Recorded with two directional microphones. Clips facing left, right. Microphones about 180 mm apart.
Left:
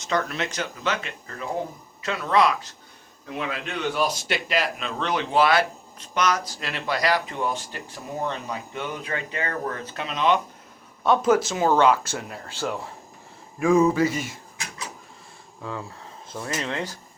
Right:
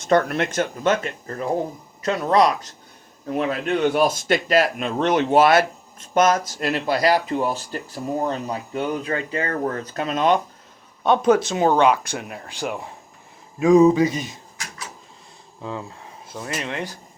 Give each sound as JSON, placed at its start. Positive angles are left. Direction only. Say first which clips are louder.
{"t": 0.0, "sound": "speech", "louder": "right 7 dB", "side_deg": -55}
{"t": 11.0, "sound": "speech", "louder": "right 3 dB", "side_deg": -20}
{"t": 15.6, "sound": "speech", "louder": "right 2 dB", "side_deg": -20}